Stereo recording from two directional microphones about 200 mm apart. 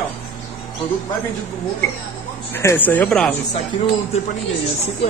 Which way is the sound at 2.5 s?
10° left (ahead or behind).